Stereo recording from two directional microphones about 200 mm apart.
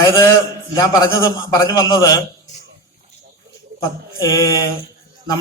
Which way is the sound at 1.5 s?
15° left (ahead or behind).